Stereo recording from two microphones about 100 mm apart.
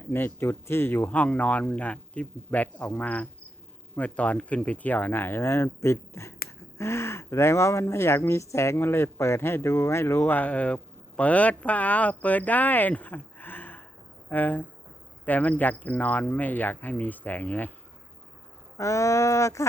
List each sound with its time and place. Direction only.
0.1 s speech: 20° left (ahead or behind)
18.8 s speech: 30° left (ahead or behind)